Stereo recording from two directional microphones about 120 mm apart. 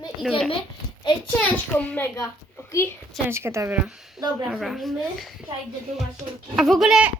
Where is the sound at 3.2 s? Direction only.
20° right (ahead or behind).